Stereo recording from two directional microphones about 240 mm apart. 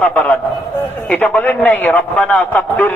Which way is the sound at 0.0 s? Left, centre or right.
Centre.